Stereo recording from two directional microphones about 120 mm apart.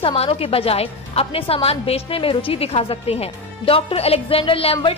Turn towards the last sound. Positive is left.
turn(degrees=50)  # may be behind; listen again after turning